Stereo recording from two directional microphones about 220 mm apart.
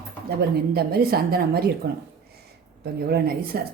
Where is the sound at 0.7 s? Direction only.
45° right (ahead or behind).